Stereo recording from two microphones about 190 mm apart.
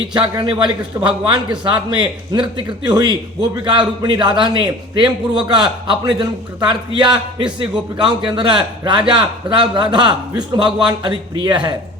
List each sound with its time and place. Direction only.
0.1 s a man's voice: 25° right (ahead or behind)